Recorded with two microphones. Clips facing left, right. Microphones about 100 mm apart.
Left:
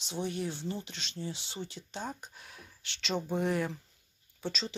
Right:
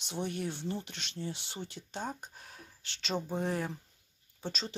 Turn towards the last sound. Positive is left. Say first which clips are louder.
# left 2 dB
turn(degrees=-45)  # may be behind; listen again after turning